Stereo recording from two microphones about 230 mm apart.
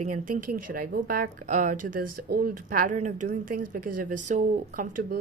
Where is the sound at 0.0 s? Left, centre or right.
Right.